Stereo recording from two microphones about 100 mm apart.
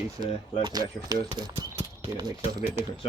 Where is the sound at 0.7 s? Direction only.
40° right (ahead or behind).